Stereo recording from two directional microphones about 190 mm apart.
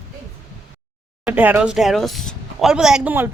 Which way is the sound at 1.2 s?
10° right (ahead or behind).